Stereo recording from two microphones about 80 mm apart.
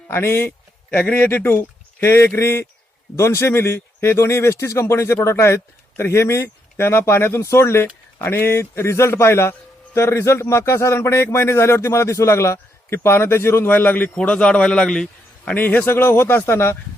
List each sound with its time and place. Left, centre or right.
0.1 s a man's voice: left; by 15.5 s centre
15.5 s a man's voice: left